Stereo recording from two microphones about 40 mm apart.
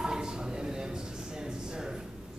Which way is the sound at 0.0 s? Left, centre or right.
Centre.